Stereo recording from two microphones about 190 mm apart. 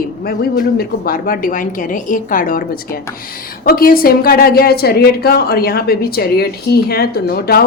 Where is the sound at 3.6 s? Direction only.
50° left (ahead or behind).